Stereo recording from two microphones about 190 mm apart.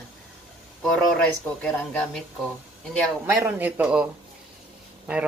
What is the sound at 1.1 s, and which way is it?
Speech, 5° left (ahead or behind).